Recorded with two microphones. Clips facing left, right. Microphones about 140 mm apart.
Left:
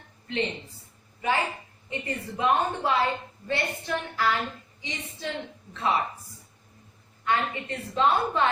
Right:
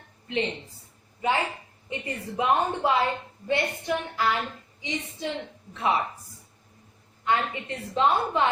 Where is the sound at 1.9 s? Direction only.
20° right (ahead or behind).